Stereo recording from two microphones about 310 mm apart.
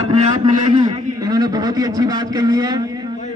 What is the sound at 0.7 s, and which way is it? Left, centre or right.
A man's voice, centre.